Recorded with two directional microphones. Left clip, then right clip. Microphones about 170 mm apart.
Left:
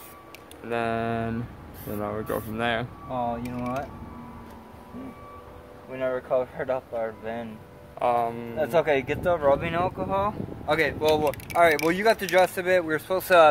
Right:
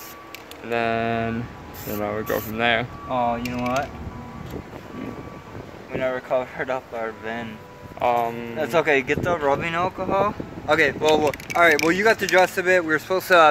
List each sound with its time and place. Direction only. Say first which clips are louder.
0.7 s speech: right 4 dB; 5° left (ahead or behind)
5.9 s speech: right 2 dB; 35° left (ahead or behind)
8.0 s speech: right 3 dB; 5° left (ahead or behind)
8.5 s speech: right 3 dB; 45° left (ahead or behind)